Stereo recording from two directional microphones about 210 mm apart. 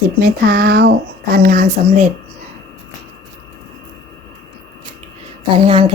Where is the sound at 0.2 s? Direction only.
50° right (ahead or behind).